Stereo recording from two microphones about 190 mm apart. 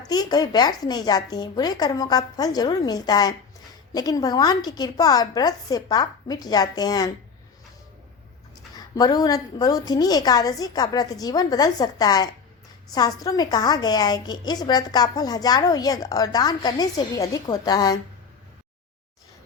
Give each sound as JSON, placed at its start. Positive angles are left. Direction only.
{"t": 0.1, "sound": "a woman's voice", "side_deg": 20}
{"t": 8.7, "sound": "a woman's voice", "side_deg": 20}